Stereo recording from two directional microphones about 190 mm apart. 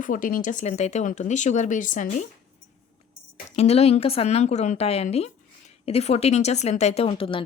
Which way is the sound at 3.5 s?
35° left (ahead or behind).